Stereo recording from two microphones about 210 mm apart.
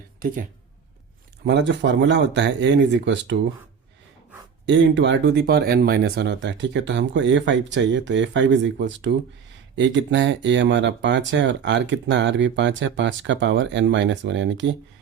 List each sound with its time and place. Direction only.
1.5 s speech: 60° right (ahead or behind)
4.6 s speech: 60° right (ahead or behind)